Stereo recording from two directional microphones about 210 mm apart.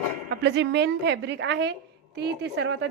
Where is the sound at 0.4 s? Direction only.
55° right (ahead or behind).